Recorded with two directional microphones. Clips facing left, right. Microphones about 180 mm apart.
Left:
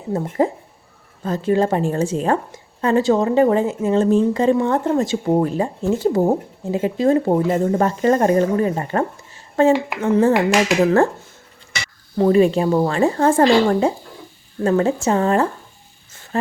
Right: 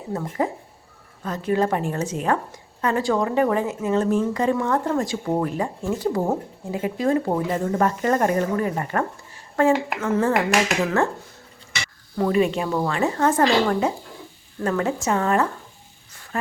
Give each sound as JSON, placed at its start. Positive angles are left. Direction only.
{"t": 0.1, "sound": "a woman's voice", "side_deg": 30}
{"t": 12.1, "sound": "a woman's voice", "side_deg": 30}
{"t": 16.1, "sound": "music", "side_deg": 25}